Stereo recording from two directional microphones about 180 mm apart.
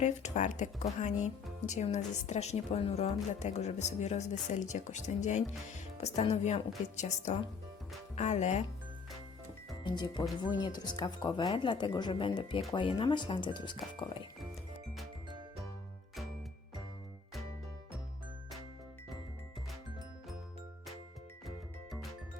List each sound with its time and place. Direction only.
0.0 s a woman's voice: 40° left (ahead or behind)
9.8 s speech: 25° left (ahead or behind)